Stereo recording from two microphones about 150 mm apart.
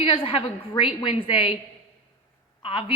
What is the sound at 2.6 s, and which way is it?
Speech, 35° left (ahead or behind).